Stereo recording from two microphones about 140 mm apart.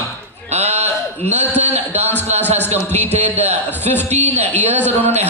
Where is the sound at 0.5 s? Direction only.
50° right (ahead or behind).